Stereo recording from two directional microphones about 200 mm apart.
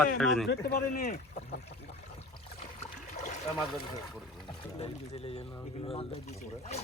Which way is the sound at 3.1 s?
35° left (ahead or behind).